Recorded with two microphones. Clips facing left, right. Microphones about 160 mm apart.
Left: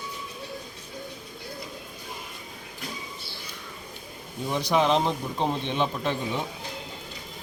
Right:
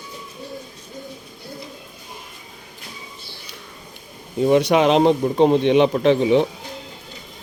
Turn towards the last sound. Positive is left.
turn(degrees=-85)